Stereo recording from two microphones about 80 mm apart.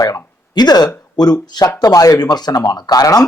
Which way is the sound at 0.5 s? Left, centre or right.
Left.